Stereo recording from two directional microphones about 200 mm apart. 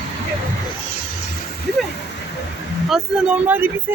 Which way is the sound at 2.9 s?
5° right (ahead or behind).